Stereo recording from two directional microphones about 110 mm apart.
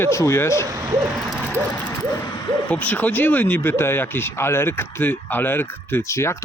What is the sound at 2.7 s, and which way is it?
Speech, 15° left (ahead or behind).